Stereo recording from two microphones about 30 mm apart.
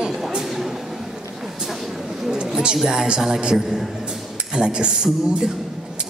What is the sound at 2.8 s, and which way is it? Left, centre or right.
A woman's voice, right.